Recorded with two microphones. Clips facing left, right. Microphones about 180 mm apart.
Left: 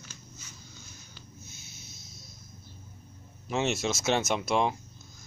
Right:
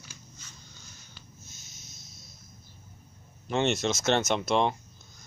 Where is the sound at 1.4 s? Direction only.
45° right (ahead or behind).